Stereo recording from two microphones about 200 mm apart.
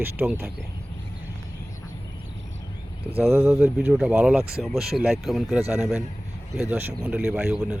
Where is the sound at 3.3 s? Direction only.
15° right (ahead or behind).